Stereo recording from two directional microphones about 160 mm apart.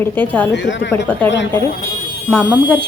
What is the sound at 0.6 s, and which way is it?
Speech, 90° left.